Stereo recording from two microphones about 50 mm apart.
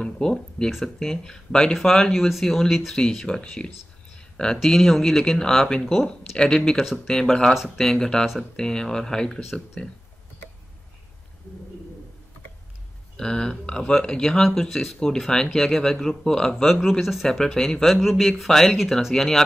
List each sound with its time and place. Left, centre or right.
0.0 s speech: centre
0.7 s speech: centre
0.9 s speech: centre
4.6 s speech: centre
13.2 s speech: centre
17.3 s speech: centre